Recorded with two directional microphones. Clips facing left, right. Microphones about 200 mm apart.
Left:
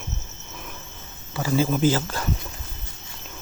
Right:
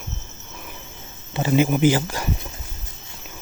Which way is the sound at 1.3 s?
20° right (ahead or behind).